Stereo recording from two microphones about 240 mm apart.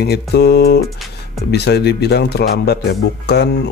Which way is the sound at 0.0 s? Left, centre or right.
Left.